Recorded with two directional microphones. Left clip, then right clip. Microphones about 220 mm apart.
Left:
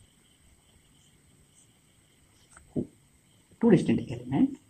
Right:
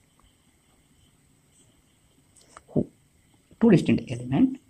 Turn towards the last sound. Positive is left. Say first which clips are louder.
# right 3 dB
turn(degrees=-45)  # may be behind; listen again after turning